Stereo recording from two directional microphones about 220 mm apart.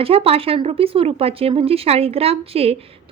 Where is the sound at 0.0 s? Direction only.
25° right (ahead or behind).